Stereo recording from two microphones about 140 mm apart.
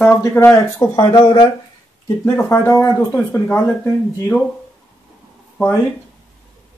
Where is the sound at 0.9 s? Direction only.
35° left (ahead or behind).